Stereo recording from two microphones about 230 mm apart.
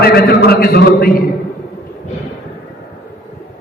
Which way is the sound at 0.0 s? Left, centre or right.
Left.